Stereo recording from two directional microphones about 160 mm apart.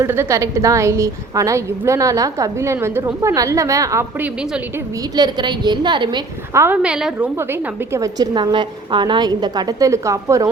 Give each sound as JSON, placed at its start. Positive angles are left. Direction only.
{"t": 0.0, "sound": "a woman's voice", "side_deg": -15}
{"t": 6.5, "sound": "a woman's voice", "side_deg": -15}
{"t": 7.9, "sound": "a woman's voice", "side_deg": -20}